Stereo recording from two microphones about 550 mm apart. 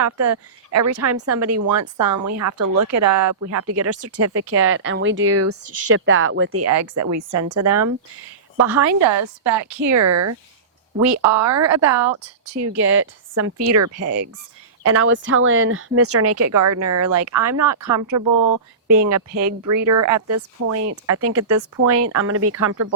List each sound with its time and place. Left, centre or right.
0.0 s speech: right
9.4 s a woman's voice: centre
9.9 s speech: right
11.4 s speech: right
11.9 s a woman's voice: centre
12.2 s speech: right